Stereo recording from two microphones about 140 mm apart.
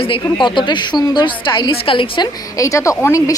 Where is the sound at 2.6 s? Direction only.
20° left (ahead or behind).